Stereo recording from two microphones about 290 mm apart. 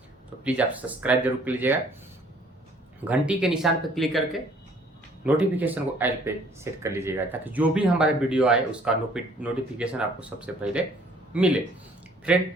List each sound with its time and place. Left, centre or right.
0.4 s speech: centre
3.0 s speech: centre